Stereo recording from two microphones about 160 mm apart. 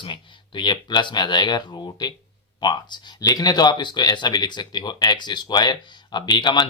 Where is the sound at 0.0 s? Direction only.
30° left (ahead or behind).